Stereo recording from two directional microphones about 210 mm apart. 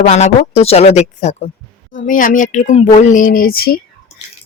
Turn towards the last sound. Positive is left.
turn(degrees=45)  # may be behind; listen again after turning